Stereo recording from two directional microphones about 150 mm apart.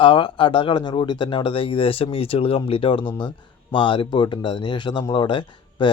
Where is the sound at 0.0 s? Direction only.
35° left (ahead or behind).